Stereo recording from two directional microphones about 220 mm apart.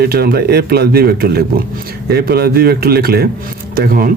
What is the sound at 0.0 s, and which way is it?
Speech, 45° right (ahead or behind).